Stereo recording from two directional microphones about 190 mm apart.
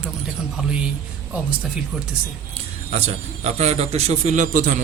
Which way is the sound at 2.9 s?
35° right (ahead or behind).